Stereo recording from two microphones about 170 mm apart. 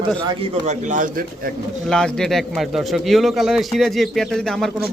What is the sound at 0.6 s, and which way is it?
Speech, 45° right (ahead or behind).